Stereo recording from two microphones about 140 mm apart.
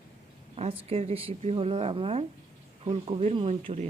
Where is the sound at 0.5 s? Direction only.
45° right (ahead or behind).